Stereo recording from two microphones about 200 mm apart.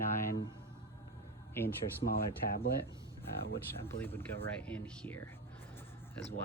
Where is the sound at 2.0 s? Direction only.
45° left (ahead or behind).